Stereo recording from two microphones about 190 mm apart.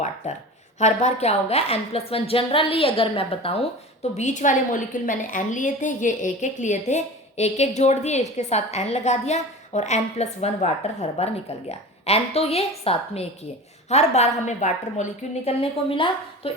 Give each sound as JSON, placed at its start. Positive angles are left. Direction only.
{"t": 0.2, "sound": "a woman's voice", "side_deg": 35}